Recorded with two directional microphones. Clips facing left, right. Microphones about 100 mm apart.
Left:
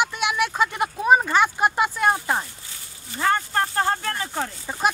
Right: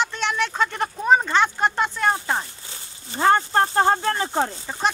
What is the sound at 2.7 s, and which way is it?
Speech, 30° right (ahead or behind).